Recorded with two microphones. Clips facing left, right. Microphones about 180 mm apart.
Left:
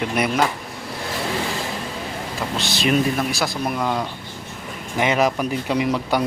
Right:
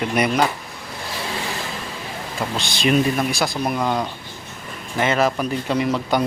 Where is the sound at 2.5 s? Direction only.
5° left (ahead or behind).